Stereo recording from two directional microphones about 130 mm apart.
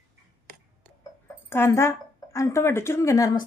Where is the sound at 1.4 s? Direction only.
20° left (ahead or behind).